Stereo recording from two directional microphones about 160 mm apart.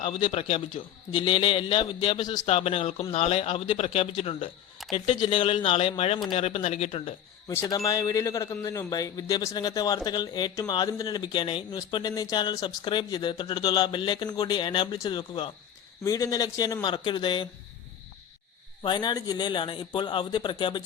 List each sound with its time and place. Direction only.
0.0 s speech: 30° left (ahead or behind)
2.4 s speech: 40° left (ahead or behind)
7.4 s speech: 20° left (ahead or behind)
18.8 s speech: 30° left (ahead or behind)